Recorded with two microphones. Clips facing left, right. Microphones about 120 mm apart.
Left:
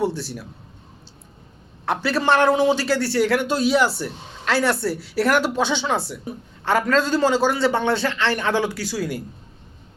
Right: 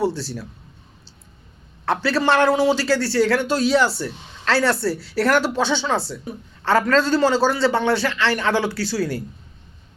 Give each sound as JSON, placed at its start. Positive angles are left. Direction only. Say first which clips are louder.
{"t": 0.0, "sound": "a man's voice", "louder": "right 1 dB", "side_deg": 20}
{"t": 1.8, "sound": "a man's voice", "louder": "right 2 dB", "side_deg": 15}